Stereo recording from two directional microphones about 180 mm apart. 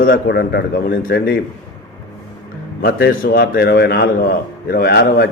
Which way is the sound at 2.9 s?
60° left (ahead or behind).